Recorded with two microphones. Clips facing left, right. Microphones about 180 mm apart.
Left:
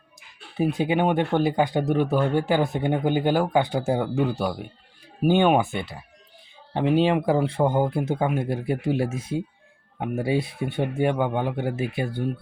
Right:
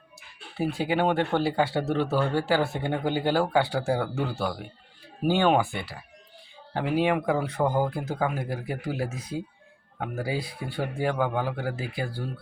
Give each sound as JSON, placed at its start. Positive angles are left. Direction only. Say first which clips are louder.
{"t": 0.2, "sound": "speech", "louder": "left 4 dB", "side_deg": 20}